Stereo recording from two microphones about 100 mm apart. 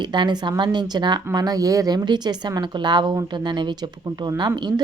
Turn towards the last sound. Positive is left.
turn(degrees=-50)  # may be behind; listen again after turning